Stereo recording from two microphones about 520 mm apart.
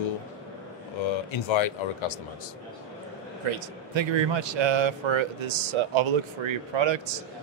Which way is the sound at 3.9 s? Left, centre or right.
Right.